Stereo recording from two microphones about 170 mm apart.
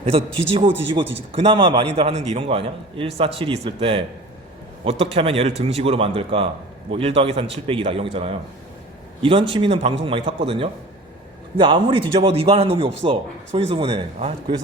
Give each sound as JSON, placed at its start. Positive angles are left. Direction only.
{"t": 0.0, "sound": "speech", "side_deg": -35}
{"t": 1.3, "sound": "a man's voice", "side_deg": -30}